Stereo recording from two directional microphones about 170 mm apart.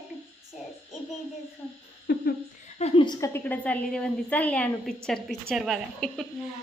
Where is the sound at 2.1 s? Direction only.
65° left (ahead or behind).